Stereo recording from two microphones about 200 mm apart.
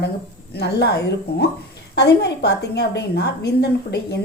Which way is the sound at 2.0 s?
55° left (ahead or behind).